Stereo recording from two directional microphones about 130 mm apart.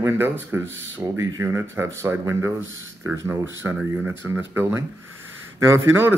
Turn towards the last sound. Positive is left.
turn(degrees=-20)  # may be behind; listen again after turning